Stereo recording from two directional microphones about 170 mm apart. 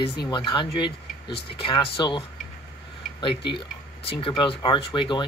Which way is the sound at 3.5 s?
35° left (ahead or behind).